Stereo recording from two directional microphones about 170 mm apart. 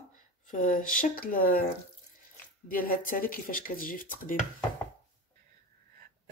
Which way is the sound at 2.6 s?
55° left (ahead or behind).